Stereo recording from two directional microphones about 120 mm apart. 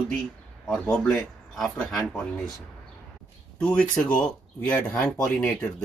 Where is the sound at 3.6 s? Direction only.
10° left (ahead or behind).